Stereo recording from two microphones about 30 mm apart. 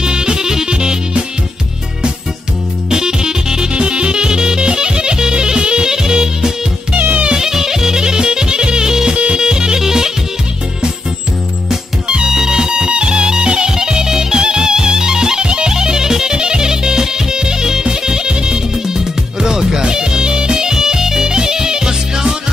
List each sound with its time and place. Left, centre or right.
0.0 s music: right
0.7 s music: right
2.9 s music: right
3.7 s music: right
9.1 s music: right
9.4 s music: right
12.3 s music: right